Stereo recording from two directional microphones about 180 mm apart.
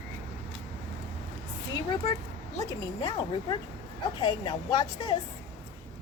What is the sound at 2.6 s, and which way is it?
Speech, 20° left (ahead or behind).